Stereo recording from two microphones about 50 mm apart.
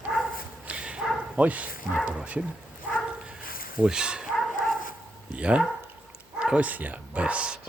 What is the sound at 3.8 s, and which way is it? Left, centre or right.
Speech, centre.